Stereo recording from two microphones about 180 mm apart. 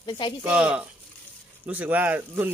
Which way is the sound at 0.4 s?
5° right (ahead or behind).